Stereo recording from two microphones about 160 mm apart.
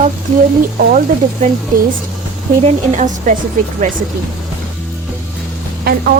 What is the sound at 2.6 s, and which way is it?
Speech, 50° right (ahead or behind).